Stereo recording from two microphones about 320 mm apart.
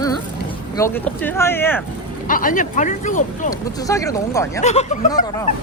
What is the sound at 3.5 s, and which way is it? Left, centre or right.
Speech, centre.